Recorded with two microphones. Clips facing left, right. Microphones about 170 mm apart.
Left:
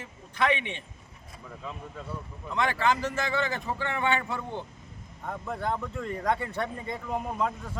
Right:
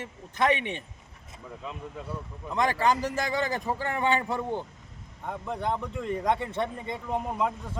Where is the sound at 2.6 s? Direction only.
40° right (ahead or behind).